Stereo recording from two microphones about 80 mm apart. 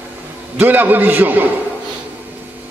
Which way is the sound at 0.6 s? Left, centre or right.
Right.